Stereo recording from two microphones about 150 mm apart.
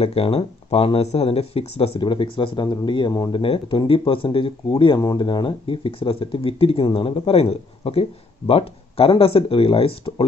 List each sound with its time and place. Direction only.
0.0 s speech: 40° left (ahead or behind)